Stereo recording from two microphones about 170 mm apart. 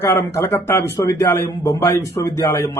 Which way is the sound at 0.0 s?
15° left (ahead or behind).